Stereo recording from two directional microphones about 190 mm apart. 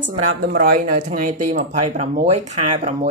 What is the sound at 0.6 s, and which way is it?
Speech, 45° right (ahead or behind).